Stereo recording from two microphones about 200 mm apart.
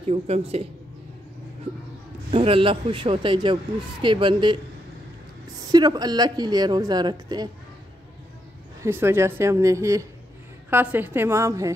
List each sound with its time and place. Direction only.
0.0 s speech: 30° right (ahead or behind)
2.3 s a woman's voice: 30° right (ahead or behind)
5.7 s a woman's voice: 20° right (ahead or behind)
8.8 s speech: 10° right (ahead or behind)